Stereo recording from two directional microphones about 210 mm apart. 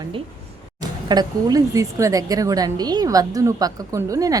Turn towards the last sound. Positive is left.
turn(degrees=-15)  # may be behind; listen again after turning